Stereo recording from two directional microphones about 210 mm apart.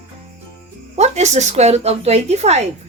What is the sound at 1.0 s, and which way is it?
Speech, 30° right (ahead or behind).